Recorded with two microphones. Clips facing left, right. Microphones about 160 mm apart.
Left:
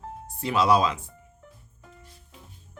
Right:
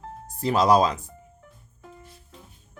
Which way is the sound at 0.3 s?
40° right (ahead or behind).